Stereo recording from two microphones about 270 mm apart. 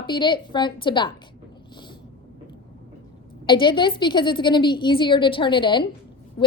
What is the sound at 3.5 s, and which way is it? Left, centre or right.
A woman's voice, centre.